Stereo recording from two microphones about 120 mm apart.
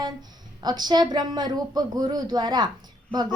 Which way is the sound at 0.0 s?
35° right (ahead or behind).